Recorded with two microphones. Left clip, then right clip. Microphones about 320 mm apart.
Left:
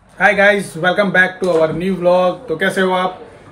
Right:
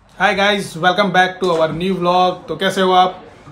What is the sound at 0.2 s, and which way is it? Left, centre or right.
Speech, centre.